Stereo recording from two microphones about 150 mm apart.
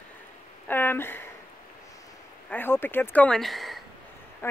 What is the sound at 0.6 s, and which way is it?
Speech, 15° left (ahead or behind).